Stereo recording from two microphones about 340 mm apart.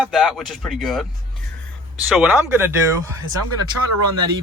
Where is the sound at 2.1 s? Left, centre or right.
Centre.